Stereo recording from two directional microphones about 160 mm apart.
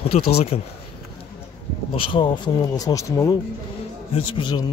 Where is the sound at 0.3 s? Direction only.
40° left (ahead or behind).